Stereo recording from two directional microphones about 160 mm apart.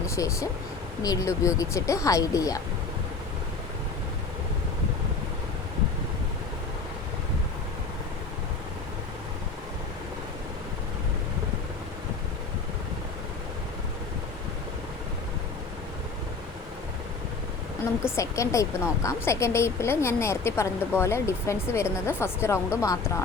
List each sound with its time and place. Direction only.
0.2 s speech: 20° left (ahead or behind)
18.0 s a woman's voice: 20° left (ahead or behind)